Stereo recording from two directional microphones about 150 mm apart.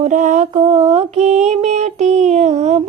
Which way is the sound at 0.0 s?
55° right (ahead or behind).